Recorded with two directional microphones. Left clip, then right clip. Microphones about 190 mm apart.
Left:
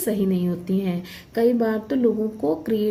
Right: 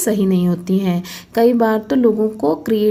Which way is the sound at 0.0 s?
45° right (ahead or behind).